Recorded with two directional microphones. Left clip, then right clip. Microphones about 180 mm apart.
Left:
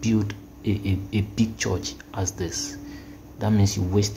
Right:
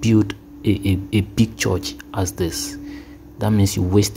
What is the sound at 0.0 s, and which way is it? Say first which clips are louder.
Speech: right 8 dB; 30° right (ahead or behind).